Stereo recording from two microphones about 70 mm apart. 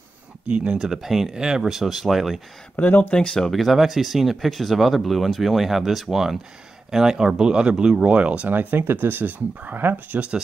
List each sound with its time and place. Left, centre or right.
0.5 s speech: centre
2.7 s speech: left; by 10.4 s centre